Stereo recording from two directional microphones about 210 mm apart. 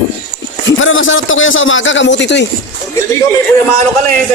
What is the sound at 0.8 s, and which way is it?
Speech, 70° left (ahead or behind).